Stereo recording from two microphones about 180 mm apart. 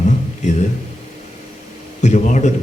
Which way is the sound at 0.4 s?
40° left (ahead or behind).